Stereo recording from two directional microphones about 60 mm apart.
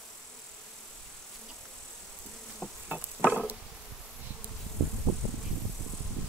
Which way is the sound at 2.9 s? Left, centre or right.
Centre.